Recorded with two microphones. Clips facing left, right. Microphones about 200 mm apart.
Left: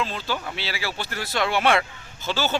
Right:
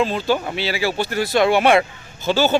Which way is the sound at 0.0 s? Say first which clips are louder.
Right 9 dB; 15° right (ahead or behind).